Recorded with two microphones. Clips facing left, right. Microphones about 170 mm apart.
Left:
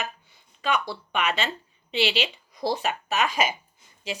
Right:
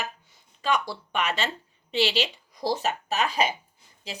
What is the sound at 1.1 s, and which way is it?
A woman's voice, 40° right (ahead or behind).